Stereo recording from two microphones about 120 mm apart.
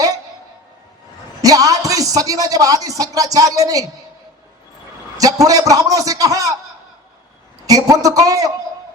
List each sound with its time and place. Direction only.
1.4 s a man's voice: 30° right (ahead or behind)
5.1 s a man's voice: 30° right (ahead or behind)
7.7 s a man's voice: 30° right (ahead or behind)